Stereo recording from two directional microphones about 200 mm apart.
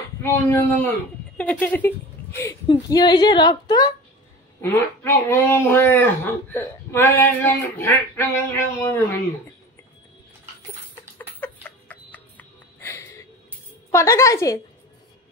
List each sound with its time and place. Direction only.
0.2 s a woman's voice: 10° left (ahead or behind)
2.7 s a woman's voice: 20° left (ahead or behind)
11.1 s a sound: 10° left (ahead or behind)
13.9 s speech: 15° left (ahead or behind)